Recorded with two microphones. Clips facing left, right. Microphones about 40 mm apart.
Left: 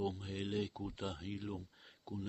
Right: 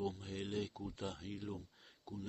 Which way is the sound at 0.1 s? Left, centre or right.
Centre.